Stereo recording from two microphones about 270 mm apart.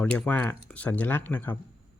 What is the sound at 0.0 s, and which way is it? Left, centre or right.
Speech, centre.